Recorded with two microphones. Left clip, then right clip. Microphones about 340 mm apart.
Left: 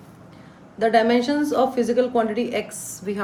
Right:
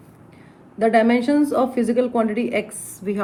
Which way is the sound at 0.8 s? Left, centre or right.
Centre.